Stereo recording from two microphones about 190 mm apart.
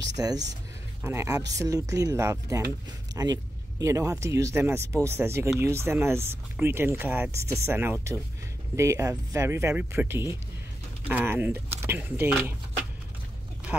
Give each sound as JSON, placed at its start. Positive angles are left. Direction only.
{"t": 0.2, "sound": "speech", "side_deg": -20}